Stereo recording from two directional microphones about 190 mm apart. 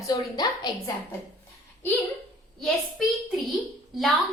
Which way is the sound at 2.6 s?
Centre (ahead or behind).